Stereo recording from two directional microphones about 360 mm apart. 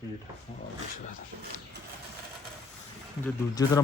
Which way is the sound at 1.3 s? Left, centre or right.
Right.